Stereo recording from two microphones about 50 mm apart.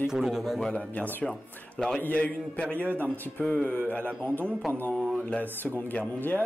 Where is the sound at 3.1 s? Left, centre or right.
Left.